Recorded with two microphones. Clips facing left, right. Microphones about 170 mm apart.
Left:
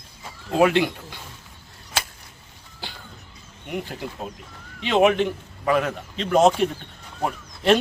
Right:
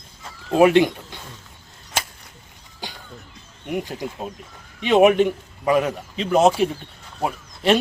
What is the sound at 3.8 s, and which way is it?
A man's voice, 15° right (ahead or behind).